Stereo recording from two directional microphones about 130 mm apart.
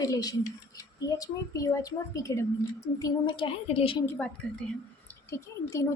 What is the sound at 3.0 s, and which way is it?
A woman's voice, 40° left (ahead or behind).